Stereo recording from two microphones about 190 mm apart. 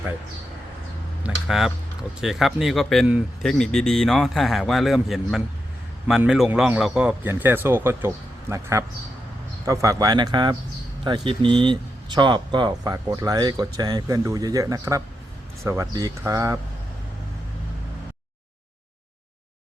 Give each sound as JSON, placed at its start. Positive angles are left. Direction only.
{"t": 1.2, "sound": "a man's voice", "side_deg": 0}